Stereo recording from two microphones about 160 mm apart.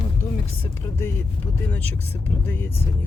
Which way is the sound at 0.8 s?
15° left (ahead or behind).